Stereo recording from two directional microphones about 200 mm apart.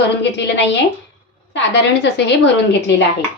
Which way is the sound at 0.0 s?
60° left (ahead or behind).